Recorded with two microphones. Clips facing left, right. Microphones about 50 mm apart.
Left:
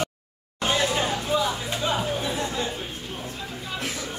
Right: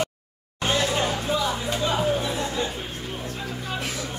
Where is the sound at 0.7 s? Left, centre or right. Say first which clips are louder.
Right 1 dB; centre.